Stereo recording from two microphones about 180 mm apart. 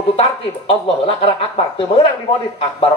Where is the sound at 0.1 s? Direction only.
30° left (ahead or behind).